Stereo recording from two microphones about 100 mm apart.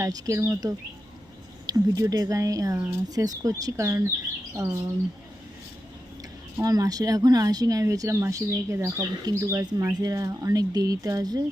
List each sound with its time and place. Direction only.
0.0 s speech: 30° right (ahead or behind)
2.7 s speech: 25° right (ahead or behind)
6.6 s speech: 40° right (ahead or behind)